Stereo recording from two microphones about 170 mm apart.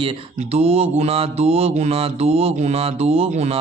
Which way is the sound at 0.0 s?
35° right (ahead or behind).